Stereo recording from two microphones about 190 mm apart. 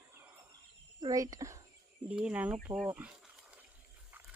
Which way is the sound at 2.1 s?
5° right (ahead or behind).